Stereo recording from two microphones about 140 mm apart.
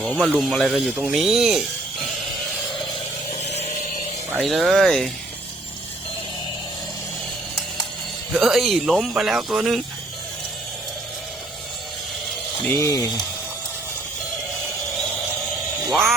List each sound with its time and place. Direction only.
0.2 s speech: centre (ahead or behind)
3.3 s vehicle: 50° left (ahead or behind)
4.4 s speech: centre (ahead or behind)
8.3 s speech: centre (ahead or behind)
12.6 s speech: 20° left (ahead or behind)
15.8 s cat: centre (ahead or behind)